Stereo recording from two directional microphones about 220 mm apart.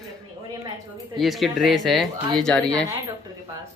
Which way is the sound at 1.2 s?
Centre (ahead or behind).